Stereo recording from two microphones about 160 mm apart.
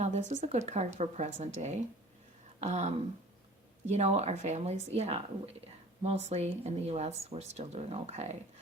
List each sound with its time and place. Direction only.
0.0 s a woman's voice: 45° right (ahead or behind)